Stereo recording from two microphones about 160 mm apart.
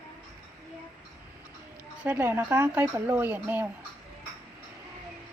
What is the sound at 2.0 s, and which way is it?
Speech, 10° right (ahead or behind).